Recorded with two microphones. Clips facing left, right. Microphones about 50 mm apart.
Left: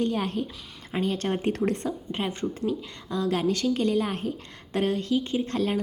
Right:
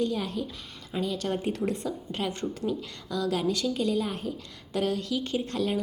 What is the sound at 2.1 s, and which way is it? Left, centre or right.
Speech, left.